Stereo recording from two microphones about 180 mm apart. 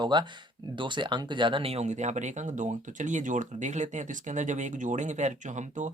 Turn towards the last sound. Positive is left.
turn(degrees=-40)  # may be behind; listen again after turning